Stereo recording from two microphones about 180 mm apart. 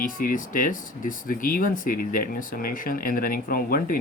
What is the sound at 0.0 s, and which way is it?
Speech, 50° left (ahead or behind).